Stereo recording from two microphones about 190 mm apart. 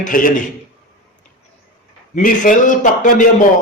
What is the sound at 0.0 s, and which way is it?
Speech, 45° left (ahead or behind).